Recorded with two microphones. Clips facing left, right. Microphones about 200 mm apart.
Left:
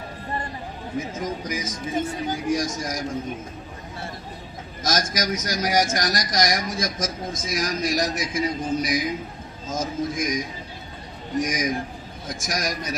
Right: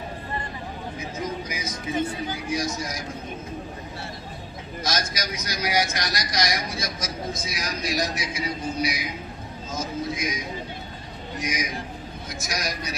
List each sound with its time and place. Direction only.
0.9 s a man's voice: 45° left (ahead or behind)
4.8 s a man's voice: 45° left (ahead or behind)